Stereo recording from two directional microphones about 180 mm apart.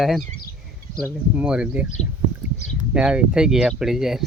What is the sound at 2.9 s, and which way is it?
Speech, 5° right (ahead or behind).